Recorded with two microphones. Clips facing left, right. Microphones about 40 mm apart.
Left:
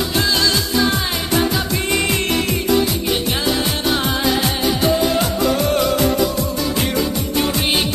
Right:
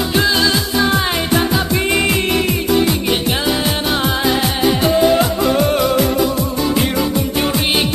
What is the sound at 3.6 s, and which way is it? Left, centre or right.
Music, centre.